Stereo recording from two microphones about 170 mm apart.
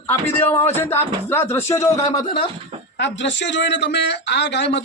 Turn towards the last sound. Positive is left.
turn(degrees=90)